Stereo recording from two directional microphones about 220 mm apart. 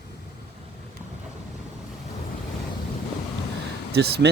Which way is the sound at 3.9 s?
50° right (ahead or behind).